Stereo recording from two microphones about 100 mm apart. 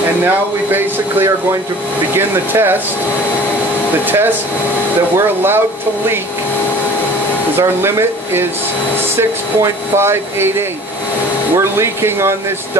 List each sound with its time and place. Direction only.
0.7 s speech: 20° right (ahead or behind)
4.0 s speech: 20° right (ahead or behind)
7.5 s speech: 25° right (ahead or behind)
11.5 s speech: 25° right (ahead or behind)